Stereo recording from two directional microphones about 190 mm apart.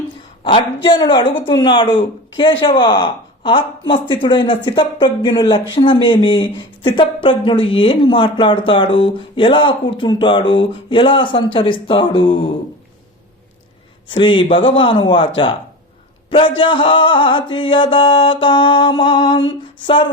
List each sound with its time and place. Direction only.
0.4 s speech: 25° left (ahead or behind)
14.1 s speech: 25° left (ahead or behind)
16.6 s speech: 25° left (ahead or behind)
19.5 s a sound: 25° left (ahead or behind)